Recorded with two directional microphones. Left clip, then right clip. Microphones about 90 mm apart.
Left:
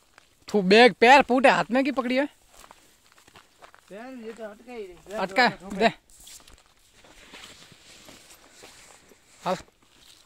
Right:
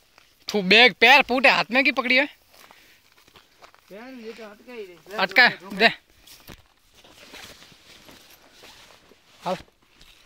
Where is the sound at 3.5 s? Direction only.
15° right (ahead or behind).